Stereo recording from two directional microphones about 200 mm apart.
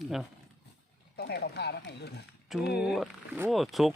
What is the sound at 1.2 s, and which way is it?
Speech, 55° left (ahead or behind).